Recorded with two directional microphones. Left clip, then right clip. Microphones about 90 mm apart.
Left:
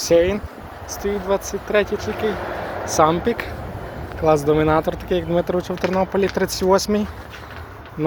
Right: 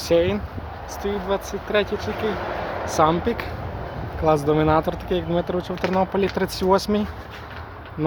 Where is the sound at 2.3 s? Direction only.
15° right (ahead or behind).